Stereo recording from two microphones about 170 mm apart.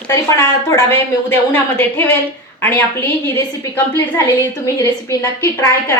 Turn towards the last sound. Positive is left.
turn(degrees=15)  # may be behind; listen again after turning